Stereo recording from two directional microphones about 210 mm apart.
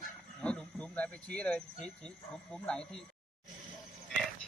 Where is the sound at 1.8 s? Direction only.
5° left (ahead or behind).